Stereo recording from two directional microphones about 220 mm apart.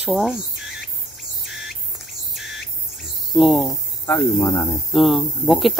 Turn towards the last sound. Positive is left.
turn(degrees=0)  # may be behind; listen again after turning